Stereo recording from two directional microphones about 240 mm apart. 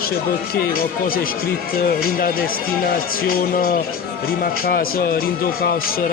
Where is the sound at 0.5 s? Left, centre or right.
Left.